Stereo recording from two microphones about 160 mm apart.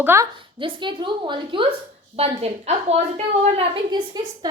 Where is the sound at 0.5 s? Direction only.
30° right (ahead or behind).